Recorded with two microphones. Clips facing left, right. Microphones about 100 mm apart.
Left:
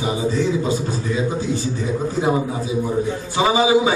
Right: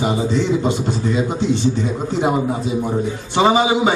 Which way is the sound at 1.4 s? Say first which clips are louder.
Right 4 dB; 70° right (ahead or behind).